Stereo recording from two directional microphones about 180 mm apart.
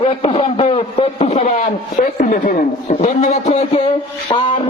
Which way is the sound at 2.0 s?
50° left (ahead or behind).